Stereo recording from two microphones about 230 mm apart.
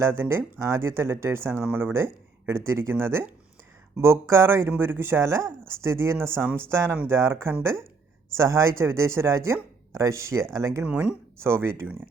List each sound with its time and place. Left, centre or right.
0.0 s speech: centre